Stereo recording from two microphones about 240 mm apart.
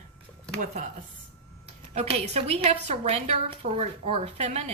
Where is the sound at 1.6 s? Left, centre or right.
Right.